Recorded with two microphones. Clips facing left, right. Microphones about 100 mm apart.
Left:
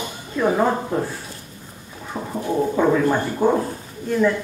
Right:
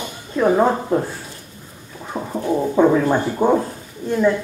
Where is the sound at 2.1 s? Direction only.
15° right (ahead or behind).